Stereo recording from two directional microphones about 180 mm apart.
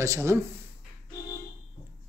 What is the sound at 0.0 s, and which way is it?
Speech, 15° right (ahead or behind).